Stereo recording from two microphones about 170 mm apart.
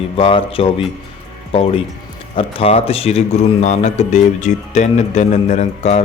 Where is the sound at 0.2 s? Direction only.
35° left (ahead or behind).